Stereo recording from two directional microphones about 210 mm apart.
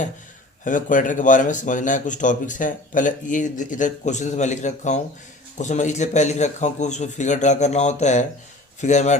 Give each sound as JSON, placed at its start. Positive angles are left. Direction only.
{"t": 0.6, "sound": "speech", "side_deg": 40}